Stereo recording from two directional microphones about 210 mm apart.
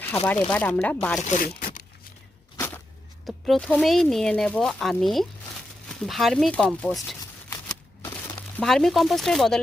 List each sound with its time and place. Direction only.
0.3 s speech: 10° left (ahead or behind)
1.2 s speech: 35° left (ahead or behind)
1.5 s tearing: 40° left (ahead or behind)
2.6 s a sound: 10° left (ahead or behind)
3.2 s speech: centre (ahead or behind)
8.5 s speech: centre (ahead or behind)